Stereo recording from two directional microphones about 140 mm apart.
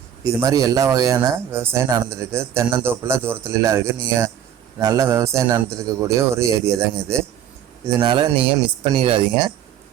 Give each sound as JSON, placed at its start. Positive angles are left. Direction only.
{"t": 0.3, "sound": "speech", "side_deg": -20}
{"t": 8.0, "sound": "speech", "side_deg": -35}